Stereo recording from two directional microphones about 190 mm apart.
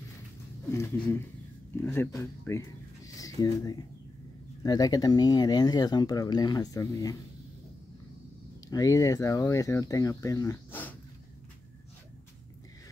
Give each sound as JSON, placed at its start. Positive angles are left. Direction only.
{"t": 0.7, "sound": "speech", "side_deg": 15}
{"t": 8.6, "sound": "speech", "side_deg": 20}